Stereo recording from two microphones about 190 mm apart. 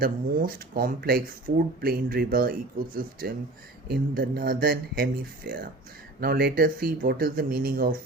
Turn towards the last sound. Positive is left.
turn(degrees=-50)  # may be behind; listen again after turning